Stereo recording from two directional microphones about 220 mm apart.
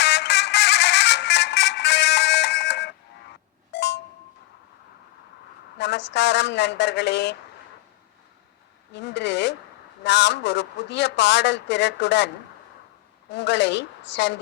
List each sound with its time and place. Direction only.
0.0 s music: 50° left (ahead or behind)
3.7 s a sound: 50° left (ahead or behind)
5.7 s speech: 50° left (ahead or behind)
8.9 s speech: 50° left (ahead or behind)
13.3 s speech: 50° left (ahead or behind)